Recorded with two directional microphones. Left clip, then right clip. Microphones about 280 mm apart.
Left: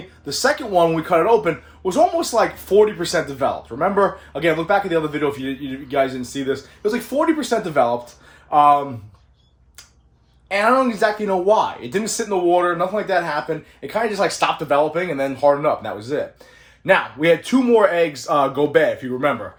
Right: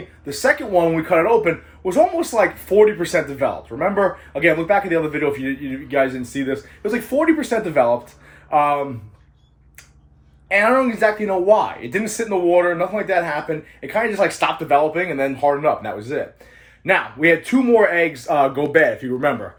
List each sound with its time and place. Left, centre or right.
0.3 s speech: centre
10.5 s speech: centre